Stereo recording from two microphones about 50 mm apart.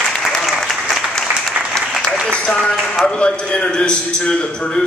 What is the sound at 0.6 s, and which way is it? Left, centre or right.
Applause, centre.